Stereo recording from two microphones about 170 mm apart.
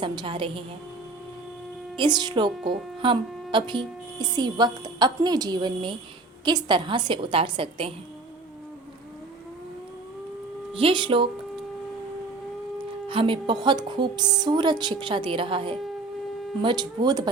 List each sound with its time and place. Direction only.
0.0 s a woman's voice: 30° right (ahead or behind)
2.0 s a woman's voice: 25° right (ahead or behind)
10.8 s a woman's voice: 30° right (ahead or behind)
13.1 s a woman's voice: 30° right (ahead or behind)